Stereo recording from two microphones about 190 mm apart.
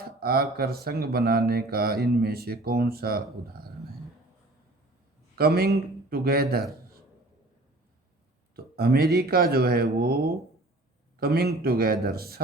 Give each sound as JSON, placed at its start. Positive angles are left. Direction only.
{"t": 0.0, "sound": "speech", "side_deg": -55}
{"t": 5.4, "sound": "speech", "side_deg": -55}
{"t": 8.5, "sound": "speech", "side_deg": -55}